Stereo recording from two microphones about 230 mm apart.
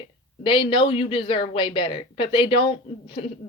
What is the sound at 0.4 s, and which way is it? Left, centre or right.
Speech, left.